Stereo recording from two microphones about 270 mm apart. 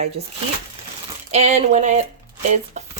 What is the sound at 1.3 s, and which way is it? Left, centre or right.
Speech, right.